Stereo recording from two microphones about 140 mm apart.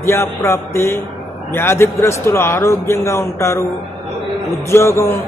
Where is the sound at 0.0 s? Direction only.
20° left (ahead or behind).